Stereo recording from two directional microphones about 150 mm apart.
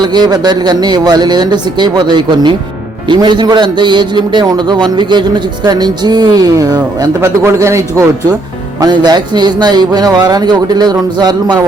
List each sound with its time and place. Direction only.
0.0 s a man's voice: 30° right (ahead or behind)